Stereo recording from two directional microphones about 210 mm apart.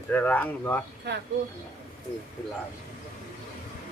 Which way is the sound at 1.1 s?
55° right (ahead or behind).